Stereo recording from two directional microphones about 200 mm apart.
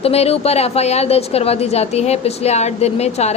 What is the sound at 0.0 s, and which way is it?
A woman's voice, 30° left (ahead or behind).